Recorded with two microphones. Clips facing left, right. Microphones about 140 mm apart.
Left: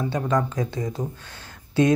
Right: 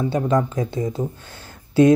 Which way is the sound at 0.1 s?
25° right (ahead or behind).